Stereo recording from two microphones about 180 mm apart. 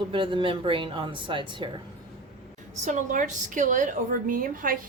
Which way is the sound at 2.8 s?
45° right (ahead or behind).